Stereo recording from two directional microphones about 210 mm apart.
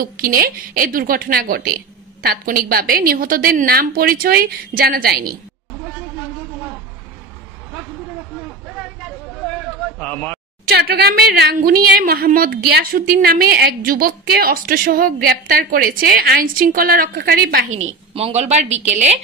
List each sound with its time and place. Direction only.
0.0 s a woman's voice: 45° right (ahead or behind)
9.9 s a sound: 5° left (ahead or behind)
10.7 s a woman's voice: 50° right (ahead or behind)
18.1 s speech: 30° right (ahead or behind)